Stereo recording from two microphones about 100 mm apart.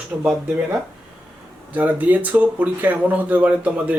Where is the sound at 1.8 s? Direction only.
15° right (ahead or behind).